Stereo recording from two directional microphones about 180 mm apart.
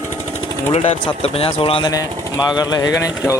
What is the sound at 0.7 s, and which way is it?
Speech, 35° left (ahead or behind).